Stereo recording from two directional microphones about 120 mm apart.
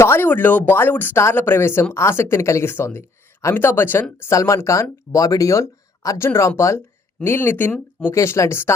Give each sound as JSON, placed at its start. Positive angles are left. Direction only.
{"t": 0.0, "sound": "speech", "side_deg": 20}